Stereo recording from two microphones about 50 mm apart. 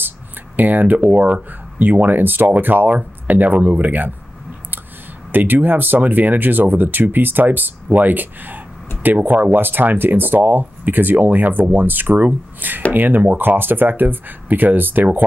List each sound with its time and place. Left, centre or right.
0.6 s speech: right
5.3 s speech: right